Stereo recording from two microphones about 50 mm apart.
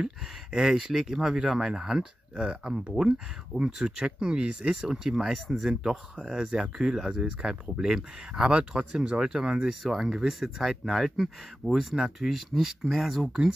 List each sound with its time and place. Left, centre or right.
0.0 s speech: centre